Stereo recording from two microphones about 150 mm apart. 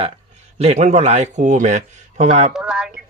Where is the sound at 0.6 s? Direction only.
50° right (ahead or behind).